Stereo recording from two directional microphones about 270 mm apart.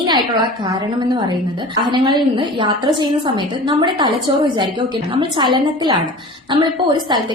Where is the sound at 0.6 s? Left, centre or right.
Centre.